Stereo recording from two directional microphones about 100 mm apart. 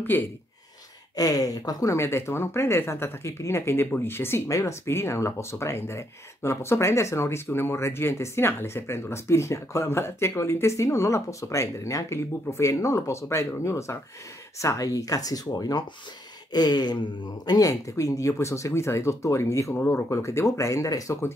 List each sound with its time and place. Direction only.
0.0 s speech: 20° left (ahead or behind)
1.1 s speech: 40° left (ahead or behind)
16.5 s a sound: 45° left (ahead or behind)
17.5 s speech: 35° left (ahead or behind)